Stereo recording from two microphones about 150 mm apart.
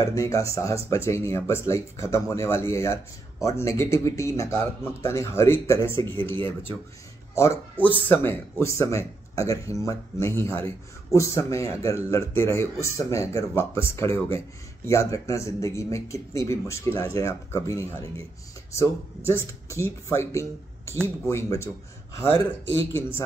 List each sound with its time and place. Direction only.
0.0 s speech: 20° left (ahead or behind)
7.3 s speech: 20° left (ahead or behind)